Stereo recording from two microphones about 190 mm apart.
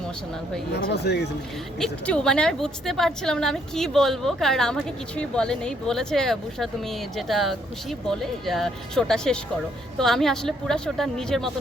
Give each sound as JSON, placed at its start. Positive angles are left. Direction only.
{"t": 0.7, "sound": "speech", "side_deg": 60}
{"t": 1.8, "sound": "a woman's voice", "side_deg": 5}